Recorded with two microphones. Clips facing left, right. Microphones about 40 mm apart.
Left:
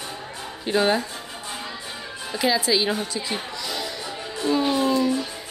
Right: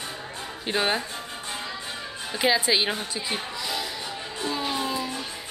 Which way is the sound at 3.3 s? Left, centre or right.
Centre.